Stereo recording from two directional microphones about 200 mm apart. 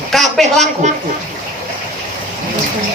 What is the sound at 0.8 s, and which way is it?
Speech, 35° right (ahead or behind).